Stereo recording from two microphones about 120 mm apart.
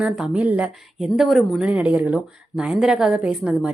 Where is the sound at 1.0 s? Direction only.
Centre (ahead or behind).